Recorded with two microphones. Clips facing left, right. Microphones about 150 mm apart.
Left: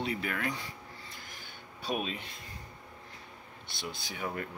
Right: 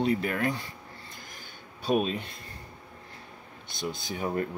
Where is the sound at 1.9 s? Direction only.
40° right (ahead or behind).